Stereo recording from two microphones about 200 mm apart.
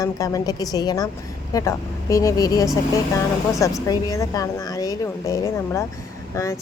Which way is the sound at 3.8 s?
20° left (ahead or behind).